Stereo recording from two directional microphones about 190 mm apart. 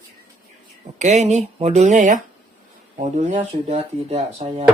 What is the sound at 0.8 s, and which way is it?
Speech, 35° right (ahead or behind).